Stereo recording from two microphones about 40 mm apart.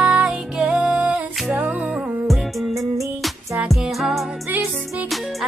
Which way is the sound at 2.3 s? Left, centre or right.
Centre.